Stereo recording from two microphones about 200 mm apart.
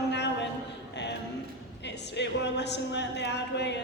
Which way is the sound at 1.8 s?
60° left (ahead or behind).